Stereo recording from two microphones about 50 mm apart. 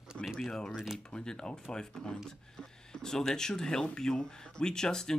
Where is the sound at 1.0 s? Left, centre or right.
Centre.